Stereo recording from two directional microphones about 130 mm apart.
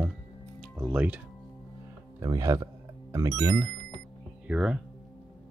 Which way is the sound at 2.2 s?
25° right (ahead or behind).